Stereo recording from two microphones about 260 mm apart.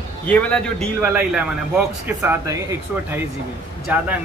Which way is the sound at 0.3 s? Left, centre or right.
Centre.